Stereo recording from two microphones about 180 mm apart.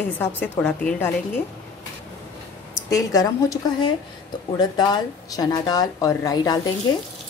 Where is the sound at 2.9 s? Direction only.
20° left (ahead or behind).